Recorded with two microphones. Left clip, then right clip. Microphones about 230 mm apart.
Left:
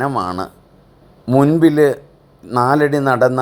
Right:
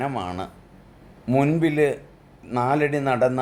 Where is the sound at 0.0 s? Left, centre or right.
Left.